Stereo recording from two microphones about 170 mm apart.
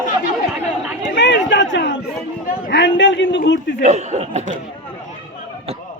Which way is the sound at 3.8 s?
45° right (ahead or behind).